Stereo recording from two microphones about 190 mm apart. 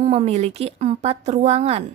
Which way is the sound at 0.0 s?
35° right (ahead or behind).